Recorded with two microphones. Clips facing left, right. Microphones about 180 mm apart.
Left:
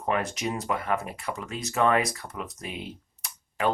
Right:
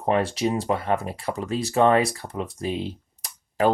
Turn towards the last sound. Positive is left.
turn(degrees=-35)  # may be behind; listen again after turning